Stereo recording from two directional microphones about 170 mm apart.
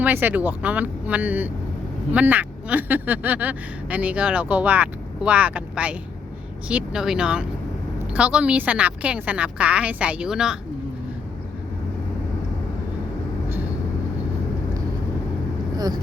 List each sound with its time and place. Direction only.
0.0 s speech: 10° right (ahead or behind)